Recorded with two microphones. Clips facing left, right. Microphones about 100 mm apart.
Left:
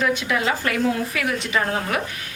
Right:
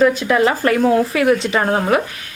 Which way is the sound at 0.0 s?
35° right (ahead or behind).